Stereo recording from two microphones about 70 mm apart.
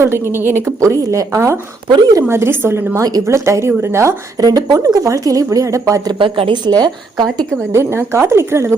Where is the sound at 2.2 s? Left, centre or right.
Right.